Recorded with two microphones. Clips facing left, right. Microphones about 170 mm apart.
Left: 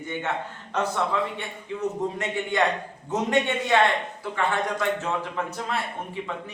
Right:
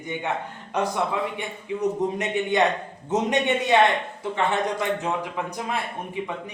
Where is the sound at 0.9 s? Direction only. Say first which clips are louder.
Even; 15° right (ahead or behind).